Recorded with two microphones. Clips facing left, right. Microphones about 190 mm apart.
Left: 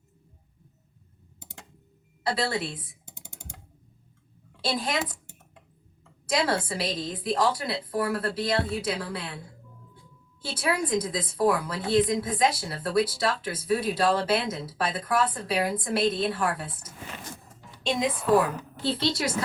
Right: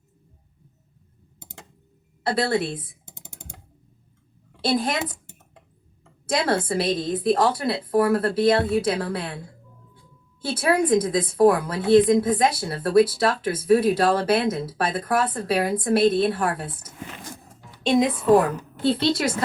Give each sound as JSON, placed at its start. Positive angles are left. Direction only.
{"t": 2.2, "sound": "a woman's voice", "side_deg": -55}
{"t": 4.6, "sound": "a woman's voice", "side_deg": -55}
{"t": 6.2, "sound": "a woman's voice", "side_deg": -55}
{"t": 10.4, "sound": "a woman's voice", "side_deg": -50}
{"t": 17.8, "sound": "a woman's voice", "side_deg": -55}